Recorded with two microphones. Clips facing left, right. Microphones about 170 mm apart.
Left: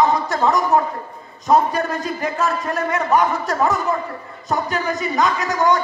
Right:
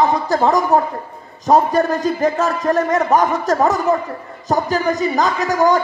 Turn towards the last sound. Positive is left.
turn(degrees=-35)  # may be behind; listen again after turning